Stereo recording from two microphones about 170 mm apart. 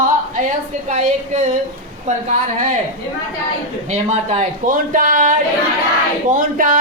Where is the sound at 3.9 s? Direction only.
40° right (ahead or behind).